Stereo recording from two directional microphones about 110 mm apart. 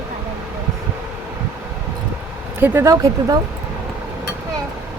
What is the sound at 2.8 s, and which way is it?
Speech, 30° right (ahead or behind).